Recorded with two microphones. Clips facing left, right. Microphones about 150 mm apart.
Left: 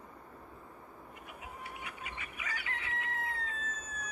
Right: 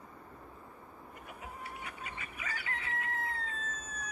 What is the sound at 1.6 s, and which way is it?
Crowing, 40° right (ahead or behind).